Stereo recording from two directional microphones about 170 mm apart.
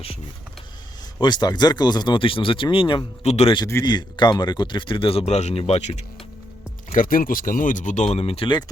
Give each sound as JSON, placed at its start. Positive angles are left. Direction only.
{"t": 1.2, "sound": "speech", "side_deg": 25}
{"t": 3.5, "sound": "speech", "side_deg": 20}
{"t": 6.9, "sound": "speech", "side_deg": 55}